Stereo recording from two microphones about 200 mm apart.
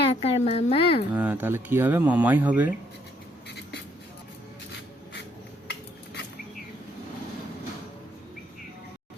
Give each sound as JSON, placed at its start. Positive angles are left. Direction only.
{"t": 0.1, "sound": "a woman's voice", "side_deg": 30}
{"t": 1.1, "sound": "speech", "side_deg": -10}